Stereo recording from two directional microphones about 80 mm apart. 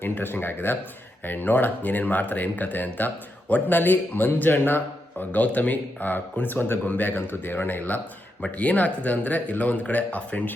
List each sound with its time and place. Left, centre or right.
0.0 s speech: left